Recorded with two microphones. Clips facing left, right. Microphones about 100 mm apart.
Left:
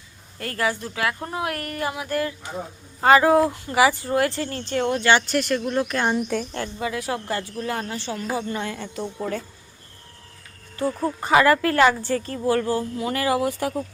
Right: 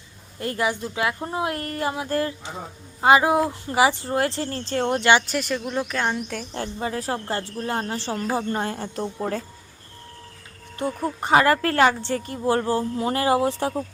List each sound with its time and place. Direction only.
0.3 s speech: 20° right (ahead or behind)
3.0 s speech: 15° right (ahead or behind); by 4.9 s 35° right (ahead or behind)
4.9 s speech: 20° right (ahead or behind)
5.2 s speech: centre (ahead or behind)
5.6 s speech: 15° right (ahead or behind)
5.9 s speech: centre (ahead or behind)
6.5 s speech: 30° right (ahead or behind)
10.8 s speech: 25° right (ahead or behind)